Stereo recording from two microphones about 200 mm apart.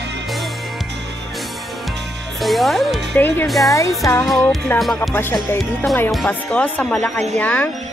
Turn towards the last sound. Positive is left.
turn(degrees=10)  # may be behind; listen again after turning